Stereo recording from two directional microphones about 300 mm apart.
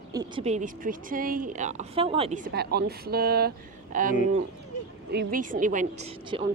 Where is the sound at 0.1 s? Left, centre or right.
Centre.